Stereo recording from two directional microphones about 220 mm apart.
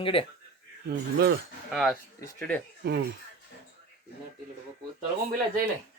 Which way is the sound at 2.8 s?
45° right (ahead or behind).